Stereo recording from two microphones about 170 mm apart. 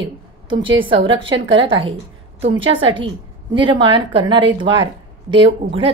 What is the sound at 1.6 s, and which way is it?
A woman's voice, 30° right (ahead or behind).